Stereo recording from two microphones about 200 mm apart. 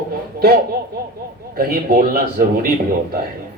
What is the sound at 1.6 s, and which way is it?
Speech, 45° right (ahead or behind).